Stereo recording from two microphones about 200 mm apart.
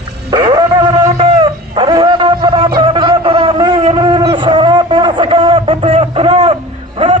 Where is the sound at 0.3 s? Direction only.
20° right (ahead or behind).